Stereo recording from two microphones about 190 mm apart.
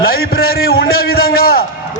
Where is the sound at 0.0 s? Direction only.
50° left (ahead or behind).